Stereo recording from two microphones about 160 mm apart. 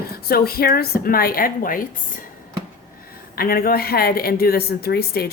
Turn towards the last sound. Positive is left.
turn(degrees=75)  # may be behind; listen again after turning